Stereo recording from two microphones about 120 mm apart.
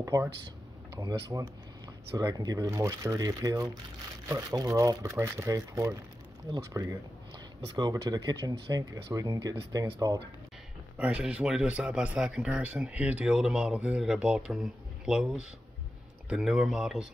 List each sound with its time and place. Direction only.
0.0 s speech: 25° right (ahead or behind)
11.0 s a man's voice: 10° right (ahead or behind)